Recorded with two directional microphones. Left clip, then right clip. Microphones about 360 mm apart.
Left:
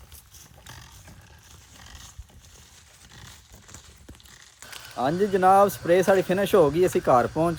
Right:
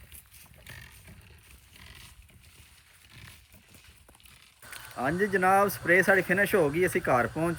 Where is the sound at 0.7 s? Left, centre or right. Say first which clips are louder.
Left 1 dB; centre.